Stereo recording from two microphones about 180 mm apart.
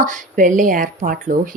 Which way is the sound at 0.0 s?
45° right (ahead or behind).